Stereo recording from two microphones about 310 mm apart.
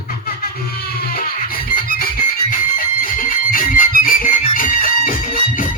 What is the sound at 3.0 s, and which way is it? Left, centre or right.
Music, left.